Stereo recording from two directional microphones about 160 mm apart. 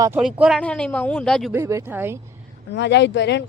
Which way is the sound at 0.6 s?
5° left (ahead or behind).